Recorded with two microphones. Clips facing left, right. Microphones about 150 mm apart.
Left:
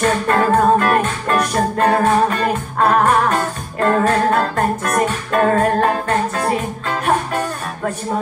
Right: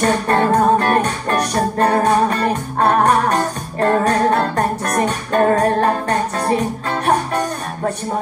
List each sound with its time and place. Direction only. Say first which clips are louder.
0.0 s music: even; 35° right (ahead or behind)